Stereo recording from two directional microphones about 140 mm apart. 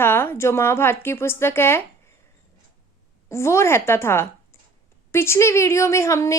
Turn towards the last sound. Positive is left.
turn(degrees=20)  # may be behind; listen again after turning